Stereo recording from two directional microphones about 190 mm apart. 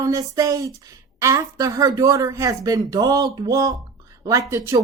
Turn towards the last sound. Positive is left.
turn(degrees=-15)  # may be behind; listen again after turning